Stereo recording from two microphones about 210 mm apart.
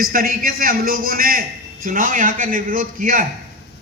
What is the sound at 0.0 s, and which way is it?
A man's voice, 40° right (ahead or behind).